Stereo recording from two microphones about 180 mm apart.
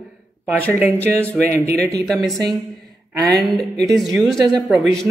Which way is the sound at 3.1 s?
20° right (ahead or behind).